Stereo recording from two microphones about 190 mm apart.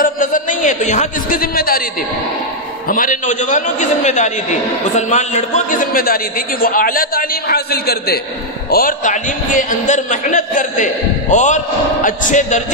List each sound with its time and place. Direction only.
0.0 s a man's voice: 45° left (ahead or behind)
2.9 s a man's voice: 45° left (ahead or behind)